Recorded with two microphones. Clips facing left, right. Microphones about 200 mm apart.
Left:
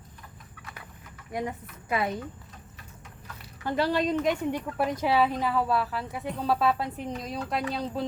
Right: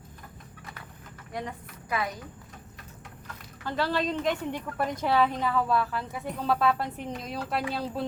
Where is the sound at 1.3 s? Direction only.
15° left (ahead or behind).